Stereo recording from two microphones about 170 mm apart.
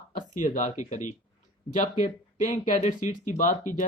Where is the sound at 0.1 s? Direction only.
50° left (ahead or behind).